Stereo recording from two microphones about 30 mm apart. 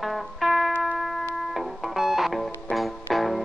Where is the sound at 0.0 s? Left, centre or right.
Centre.